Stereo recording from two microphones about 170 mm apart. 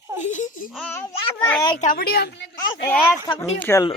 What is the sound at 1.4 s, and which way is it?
Speech, 15° left (ahead or behind).